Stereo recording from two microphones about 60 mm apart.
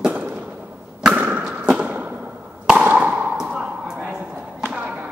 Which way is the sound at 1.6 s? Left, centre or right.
Centre.